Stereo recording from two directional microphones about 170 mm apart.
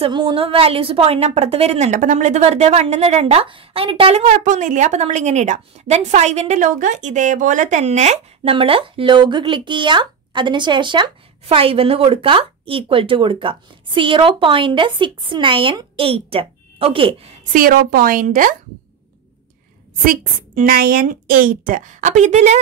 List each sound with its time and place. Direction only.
0.0 s a woman's voice: 30° right (ahead or behind)
17.5 s a woman's voice: 55° right (ahead or behind)
20.1 s a woman's voice: 55° right (ahead or behind)